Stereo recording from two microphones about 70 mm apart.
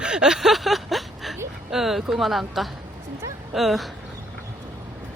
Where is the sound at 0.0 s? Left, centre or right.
Centre.